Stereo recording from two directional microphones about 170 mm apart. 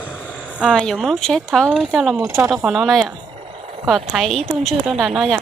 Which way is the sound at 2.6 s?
Centre (ahead or behind).